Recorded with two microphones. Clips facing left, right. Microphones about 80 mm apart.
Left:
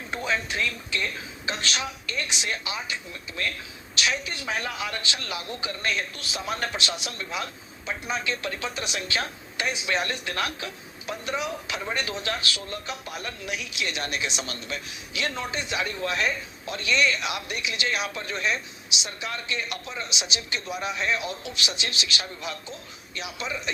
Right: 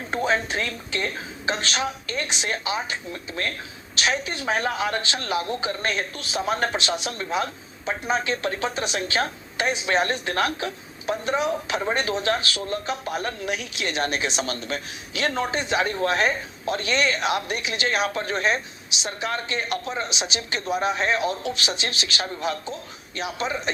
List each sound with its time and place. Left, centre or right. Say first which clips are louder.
0.1 s a woman's voice: right 5 dB; right